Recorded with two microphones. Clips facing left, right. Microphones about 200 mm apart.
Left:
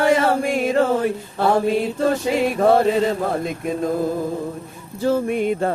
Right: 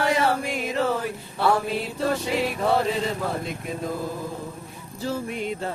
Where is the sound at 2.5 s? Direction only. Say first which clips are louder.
Left 8 dB; 50° left (ahead or behind).